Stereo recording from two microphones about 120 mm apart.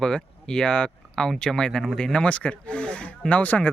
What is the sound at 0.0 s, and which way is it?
Speech, 5° left (ahead or behind).